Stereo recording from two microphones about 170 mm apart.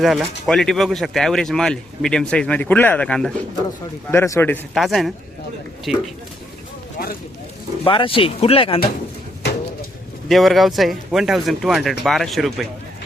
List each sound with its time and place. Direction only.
0.0 s a man's voice: centre (ahead or behind)
4.8 s speech: centre (ahead or behind)
7.9 s speech: 30° left (ahead or behind)
10.2 s speech: centre (ahead or behind)